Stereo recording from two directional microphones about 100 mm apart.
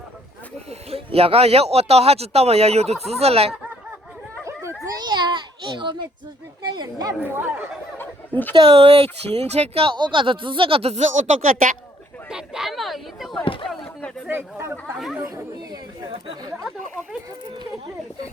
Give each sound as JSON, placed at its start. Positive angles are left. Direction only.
{"t": 0.7, "sound": "speech", "side_deg": -80}
{"t": 4.9, "sound": "a child's voice", "side_deg": -50}
{"t": 7.1, "sound": "speech", "side_deg": -20}
{"t": 7.9, "sound": "fowl", "side_deg": 20}
{"t": 8.5, "sound": "speech", "side_deg": -55}
{"t": 9.3, "sound": "speech", "side_deg": -90}
{"t": 9.9, "sound": "speech", "side_deg": -55}
{"t": 12.3, "sound": "speech", "side_deg": -5}
{"t": 13.4, "sound": "speech", "side_deg": 60}
{"t": 14.3, "sound": "speech", "side_deg": -25}
{"t": 14.9, "sound": "speech", "side_deg": -5}